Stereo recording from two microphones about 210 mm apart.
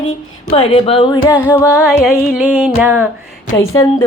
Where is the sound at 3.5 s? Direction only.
15° left (ahead or behind).